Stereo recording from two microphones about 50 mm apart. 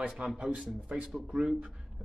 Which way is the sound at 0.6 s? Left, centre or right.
Centre.